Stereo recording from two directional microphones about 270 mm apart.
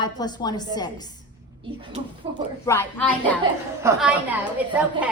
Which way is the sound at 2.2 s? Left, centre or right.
Right.